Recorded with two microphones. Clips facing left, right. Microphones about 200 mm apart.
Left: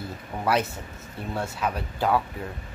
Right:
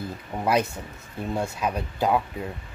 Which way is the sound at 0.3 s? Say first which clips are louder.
Right 1 dB; 25° right (ahead or behind).